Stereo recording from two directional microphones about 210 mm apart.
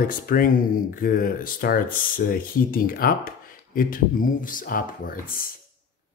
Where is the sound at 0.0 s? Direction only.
40° left (ahead or behind).